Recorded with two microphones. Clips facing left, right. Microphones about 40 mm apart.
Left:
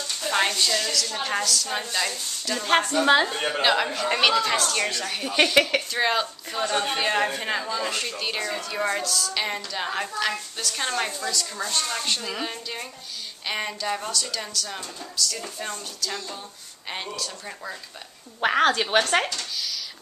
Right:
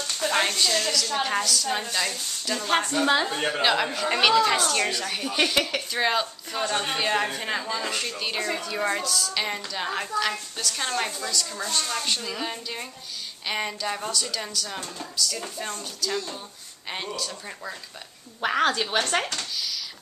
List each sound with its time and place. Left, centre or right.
0.4 s a woman's voice: centre
0.8 s a woman's voice: centre
5.9 s a woman's voice: centre
18.5 s a woman's voice: centre